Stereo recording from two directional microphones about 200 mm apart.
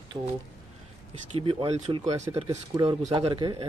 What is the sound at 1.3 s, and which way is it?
Speech, 25° right (ahead or behind).